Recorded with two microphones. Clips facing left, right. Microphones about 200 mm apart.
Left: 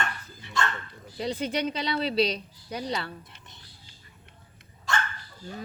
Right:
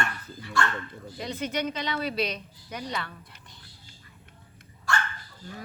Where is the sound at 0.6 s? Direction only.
20° left (ahead or behind).